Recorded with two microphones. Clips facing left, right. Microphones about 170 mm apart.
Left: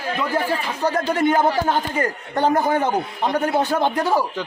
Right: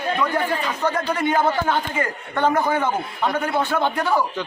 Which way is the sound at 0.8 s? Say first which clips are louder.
Left 4 dB; 45° left (ahead or behind).